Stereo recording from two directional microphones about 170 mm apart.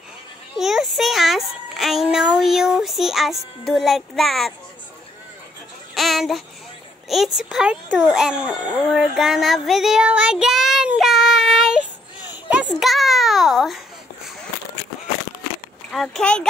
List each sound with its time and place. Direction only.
0.6 s a sound: centre (ahead or behind)
2.3 s speech: 5° right (ahead or behind)
5.9 s child singing: centre (ahead or behind)
7.1 s speech: centre (ahead or behind)
8.9 s child singing: centre (ahead or behind)
12.3 s babbling: 5° right (ahead or behind)
15.9 s speech: centre (ahead or behind)